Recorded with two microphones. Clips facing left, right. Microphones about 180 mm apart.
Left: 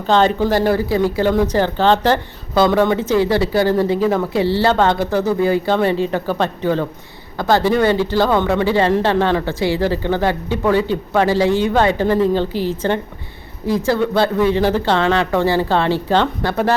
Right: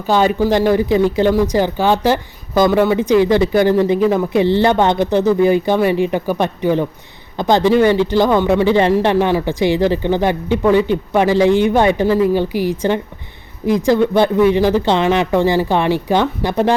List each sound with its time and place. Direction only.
0.1 s speech: 10° right (ahead or behind)